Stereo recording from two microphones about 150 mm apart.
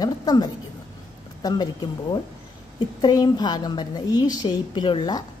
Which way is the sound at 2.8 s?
30° left (ahead or behind).